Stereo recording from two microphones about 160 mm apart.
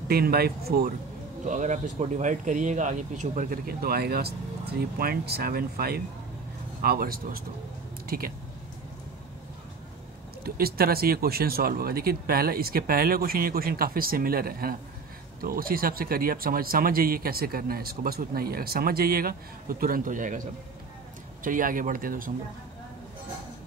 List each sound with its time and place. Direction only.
0.1 s speech: 75° right (ahead or behind)
1.4 s speech: 50° right (ahead or behind); by 8.3 s 65° right (ahead or behind)
10.4 s speech: 70° right (ahead or behind); by 20.4 s 55° right (ahead or behind)
21.5 s speech: 60° right (ahead or behind)